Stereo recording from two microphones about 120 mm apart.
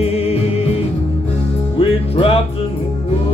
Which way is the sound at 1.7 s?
50° left (ahead or behind).